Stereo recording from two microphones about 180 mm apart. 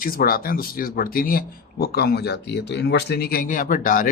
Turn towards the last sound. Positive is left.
turn(degrees=50)  # may be behind; listen again after turning